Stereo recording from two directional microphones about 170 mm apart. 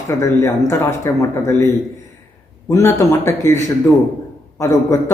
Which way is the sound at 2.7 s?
15° left (ahead or behind).